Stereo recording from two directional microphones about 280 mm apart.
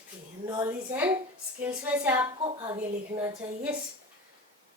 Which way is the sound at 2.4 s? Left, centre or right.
Centre.